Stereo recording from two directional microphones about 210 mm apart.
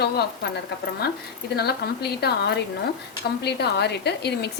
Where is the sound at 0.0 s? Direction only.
50° left (ahead or behind).